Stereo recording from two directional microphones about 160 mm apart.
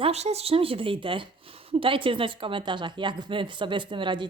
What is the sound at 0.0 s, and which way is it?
A woman's voice, 40° right (ahead or behind).